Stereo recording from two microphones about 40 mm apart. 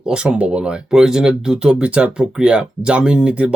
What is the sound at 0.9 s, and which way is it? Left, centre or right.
Speech, centre.